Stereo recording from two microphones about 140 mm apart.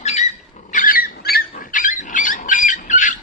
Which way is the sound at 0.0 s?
50° left (ahead or behind).